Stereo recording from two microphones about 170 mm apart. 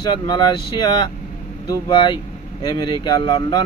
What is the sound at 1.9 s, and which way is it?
Speech, 25° left (ahead or behind).